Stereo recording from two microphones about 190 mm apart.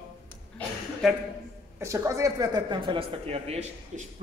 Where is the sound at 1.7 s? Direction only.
15° right (ahead or behind).